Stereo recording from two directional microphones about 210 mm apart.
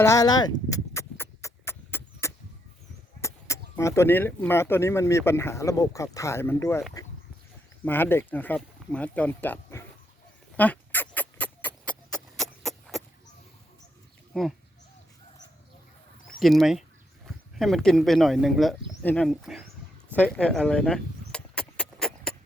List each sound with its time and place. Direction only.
0.0 s speech: 15° left (ahead or behind)
0.7 s a sound: 10° left (ahead or behind)
3.2 s speech: 15° left (ahead or behind)
7.9 s speech: 10° left (ahead or behind)
10.6 s rodents: 10° left (ahead or behind)
16.4 s speech: centre (ahead or behind)
20.1 s vehicle: 5° left (ahead or behind)